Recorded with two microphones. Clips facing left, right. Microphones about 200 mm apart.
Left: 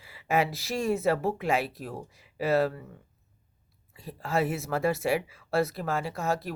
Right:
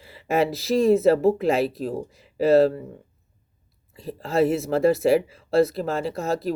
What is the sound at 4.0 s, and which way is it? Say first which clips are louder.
Speech: right 7 dB; 35° right (ahead or behind).